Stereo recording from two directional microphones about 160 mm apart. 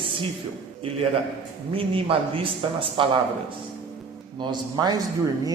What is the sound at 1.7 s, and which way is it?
Speech, 35° right (ahead or behind).